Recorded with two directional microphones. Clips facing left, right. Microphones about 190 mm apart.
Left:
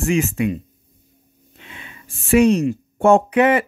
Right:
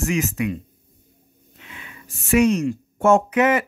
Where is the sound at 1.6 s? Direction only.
30° left (ahead or behind).